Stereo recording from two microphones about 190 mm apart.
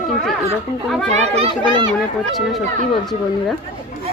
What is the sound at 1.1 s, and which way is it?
Speech, 30° right (ahead or behind).